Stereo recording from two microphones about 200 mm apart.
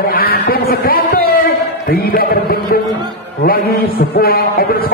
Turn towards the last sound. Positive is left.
turn(degrees=50)  # may be behind; listen again after turning